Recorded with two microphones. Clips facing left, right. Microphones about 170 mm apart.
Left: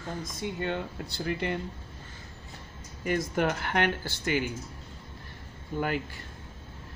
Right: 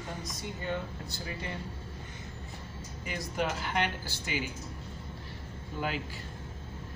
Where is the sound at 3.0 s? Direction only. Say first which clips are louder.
Left 6 dB; 55° left (ahead or behind).